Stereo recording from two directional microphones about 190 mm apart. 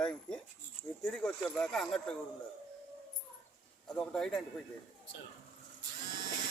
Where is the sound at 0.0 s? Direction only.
5° left (ahead or behind).